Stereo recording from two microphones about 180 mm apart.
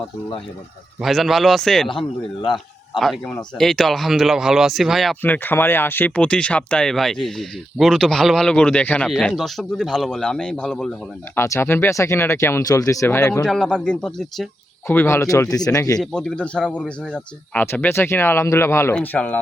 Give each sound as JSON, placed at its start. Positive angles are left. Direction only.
{"t": 1.0, "sound": "speech", "side_deg": 0}
{"t": 5.2, "sound": "speech", "side_deg": 10}
{"t": 11.3, "sound": "speech", "side_deg": 15}
{"t": 13.4, "sound": "speech", "side_deg": 5}
{"t": 14.8, "sound": "speech", "side_deg": 15}
{"t": 16.0, "sound": "speech", "side_deg": 5}